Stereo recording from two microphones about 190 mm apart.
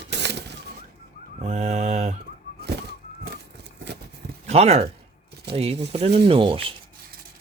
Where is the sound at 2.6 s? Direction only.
60° right (ahead or behind).